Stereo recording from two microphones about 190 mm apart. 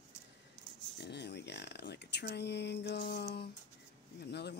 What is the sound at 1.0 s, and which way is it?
Speech, 60° left (ahead or behind).